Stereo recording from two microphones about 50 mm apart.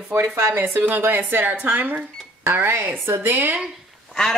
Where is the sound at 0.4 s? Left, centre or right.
Right.